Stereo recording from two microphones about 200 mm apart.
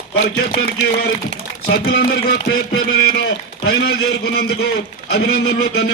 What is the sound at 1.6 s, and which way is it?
A man's voice, 55° left (ahead or behind).